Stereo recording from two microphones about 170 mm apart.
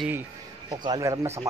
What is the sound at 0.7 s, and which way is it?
Speech, 25° right (ahead or behind).